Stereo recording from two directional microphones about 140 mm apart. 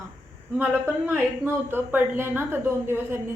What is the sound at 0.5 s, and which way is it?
A woman's voice, 15° right (ahead or behind).